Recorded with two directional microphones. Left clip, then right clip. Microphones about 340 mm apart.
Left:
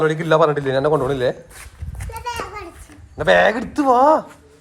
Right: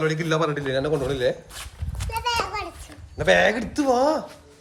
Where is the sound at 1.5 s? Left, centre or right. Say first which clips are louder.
Right 2 dB; centre.